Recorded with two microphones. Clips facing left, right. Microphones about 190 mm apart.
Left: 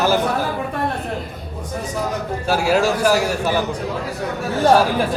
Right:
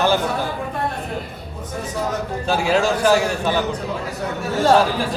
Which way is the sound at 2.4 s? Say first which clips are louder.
Left 1 dB; 5° left (ahead or behind).